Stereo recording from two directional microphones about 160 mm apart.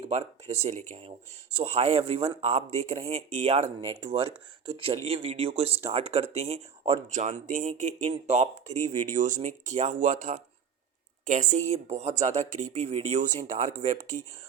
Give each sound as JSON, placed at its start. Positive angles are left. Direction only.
{"t": 0.1, "sound": "speech", "side_deg": -40}